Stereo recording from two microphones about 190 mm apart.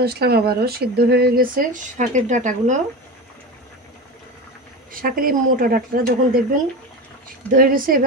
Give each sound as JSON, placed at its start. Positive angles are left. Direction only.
{"t": 0.0, "sound": "speech", "side_deg": -55}
{"t": 4.9, "sound": "speech", "side_deg": -50}